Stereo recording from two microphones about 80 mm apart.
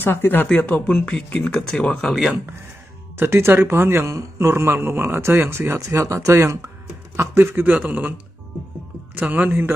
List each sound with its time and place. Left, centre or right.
0.0 s speech: left
1.6 s speech: centre
3.2 s a man's voice: right
9.1 s speech: right